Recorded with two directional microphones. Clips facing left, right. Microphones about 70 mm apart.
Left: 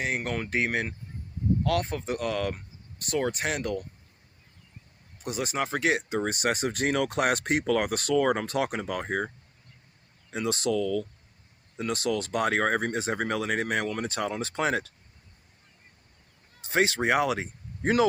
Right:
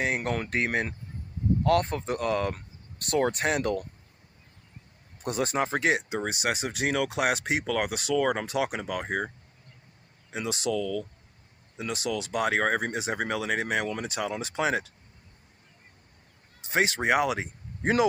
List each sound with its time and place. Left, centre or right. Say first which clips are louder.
0.3 s speech: even; right
3.0 s speech: right 3 dB; right
5.2 s speech: right 3 dB; right
5.5 s speech: even; right
6.1 s speech: left 2 dB; centre
10.3 s speech: left 3 dB; centre
10.7 s speech: left 2 dB; centre
11.8 s speech: left 3 dB; centre
16.6 s speech: left 1 dB; right